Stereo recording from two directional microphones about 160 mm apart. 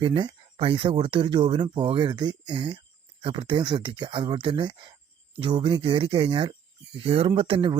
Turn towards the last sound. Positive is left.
turn(degrees=-35)  # may be behind; listen again after turning